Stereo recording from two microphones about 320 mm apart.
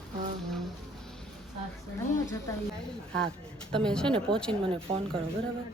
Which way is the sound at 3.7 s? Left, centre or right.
Centre.